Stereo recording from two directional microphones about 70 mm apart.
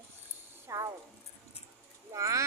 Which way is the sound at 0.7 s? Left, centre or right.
Right.